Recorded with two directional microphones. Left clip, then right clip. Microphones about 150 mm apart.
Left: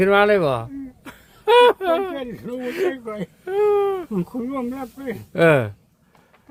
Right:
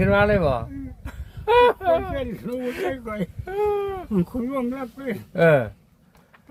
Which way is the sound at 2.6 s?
45° left (ahead or behind).